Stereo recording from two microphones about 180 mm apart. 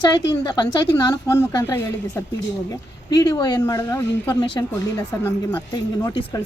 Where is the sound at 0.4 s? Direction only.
20° left (ahead or behind).